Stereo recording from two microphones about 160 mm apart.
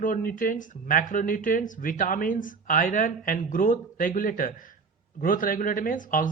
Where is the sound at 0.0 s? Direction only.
60° left (ahead or behind).